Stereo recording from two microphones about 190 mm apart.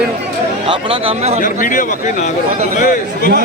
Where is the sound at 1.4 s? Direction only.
45° left (ahead or behind).